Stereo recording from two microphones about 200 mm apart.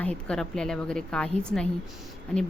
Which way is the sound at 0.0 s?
5° left (ahead or behind).